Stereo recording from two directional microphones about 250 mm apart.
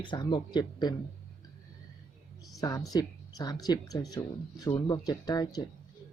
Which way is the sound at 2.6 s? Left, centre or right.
Centre.